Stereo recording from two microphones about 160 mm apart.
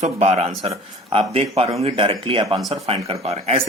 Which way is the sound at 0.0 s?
45° right (ahead or behind).